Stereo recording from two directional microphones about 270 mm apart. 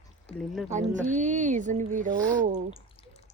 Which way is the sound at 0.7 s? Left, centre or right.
Right.